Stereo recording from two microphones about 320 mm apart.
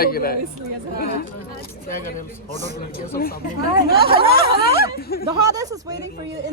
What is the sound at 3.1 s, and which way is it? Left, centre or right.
Speech, left.